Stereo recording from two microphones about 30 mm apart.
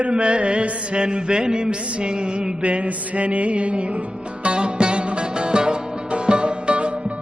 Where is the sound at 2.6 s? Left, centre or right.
Right.